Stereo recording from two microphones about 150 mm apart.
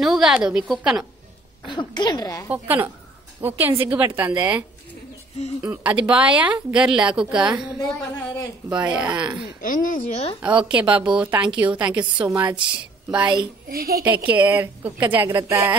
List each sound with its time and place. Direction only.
0.0 s a woman's voice: centre (ahead or behind)
1.7 s a woman's voice: 30° left (ahead or behind)
2.5 s speech: 15° right (ahead or behind)
5.6 s speech: 15° right (ahead or behind)
9.6 s speech: 65° left (ahead or behind)
10.4 s speech: 5° right (ahead or behind)
12.3 s a woman's voice: 25° right (ahead or behind)
13.7 s a woman's voice: 85° right
14.0 s speech: 10° right (ahead or behind)